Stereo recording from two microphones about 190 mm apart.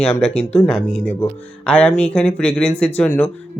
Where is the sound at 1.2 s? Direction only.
5° left (ahead or behind).